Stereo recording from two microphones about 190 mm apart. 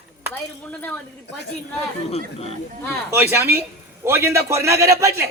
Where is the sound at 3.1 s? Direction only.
10° right (ahead or behind).